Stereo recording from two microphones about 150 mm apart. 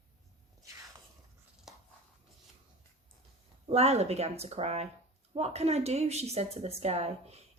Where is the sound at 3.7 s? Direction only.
45° right (ahead or behind).